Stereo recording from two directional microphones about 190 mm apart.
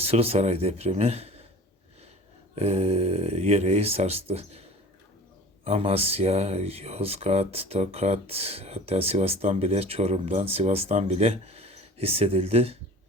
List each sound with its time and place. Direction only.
0.0 s speech: 30° right (ahead or behind)
2.6 s speech: 35° right (ahead or behind)
5.6 s speech: 30° right (ahead or behind)